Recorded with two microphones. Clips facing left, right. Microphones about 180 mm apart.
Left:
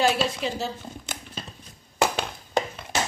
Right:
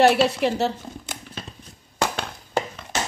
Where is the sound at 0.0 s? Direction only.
65° right (ahead or behind).